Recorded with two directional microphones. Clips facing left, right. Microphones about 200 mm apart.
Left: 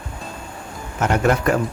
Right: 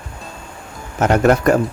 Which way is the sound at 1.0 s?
45° right (ahead or behind).